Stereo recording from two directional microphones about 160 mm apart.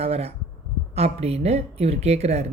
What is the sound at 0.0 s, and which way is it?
Speech, 40° right (ahead or behind).